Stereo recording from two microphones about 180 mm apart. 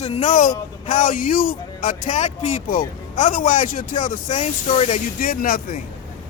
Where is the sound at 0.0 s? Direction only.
40° left (ahead or behind).